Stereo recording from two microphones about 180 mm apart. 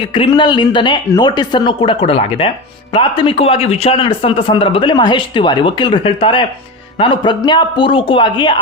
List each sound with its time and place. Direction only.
0.1 s speech: 25° left (ahead or behind)